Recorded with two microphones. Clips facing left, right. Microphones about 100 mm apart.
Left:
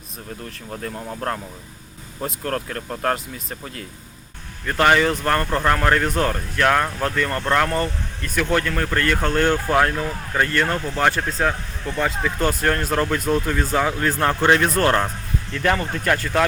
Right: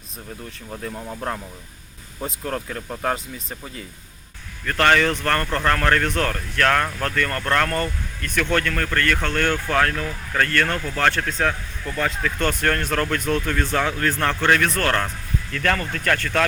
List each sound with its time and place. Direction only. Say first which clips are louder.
0.7 s speech: left 1 dB; centre (ahead or behind)
2.2 s speech: left 2 dB; 5° right (ahead or behind)
4.6 s speech: left 1 dB; 15° left (ahead or behind)
9.1 s speech: left 3 dB; 25° left (ahead or behind)
11.3 s speech: left 1 dB; 5° left (ahead or behind)